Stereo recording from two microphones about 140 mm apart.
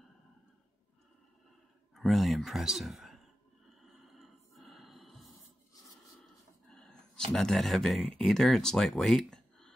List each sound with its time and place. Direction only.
2.0 s speech: centre (ahead or behind)
3.8 s music: centre (ahead or behind)
6.7 s a sound: 5° left (ahead or behind)
7.3 s speech: 5° left (ahead or behind)